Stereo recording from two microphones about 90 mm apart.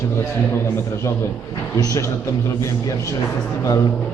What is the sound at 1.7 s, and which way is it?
Speech, 35° left (ahead or behind).